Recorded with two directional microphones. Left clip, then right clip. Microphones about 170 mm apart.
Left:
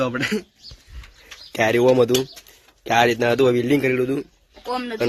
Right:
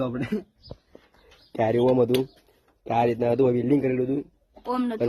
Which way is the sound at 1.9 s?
Centre (ahead or behind).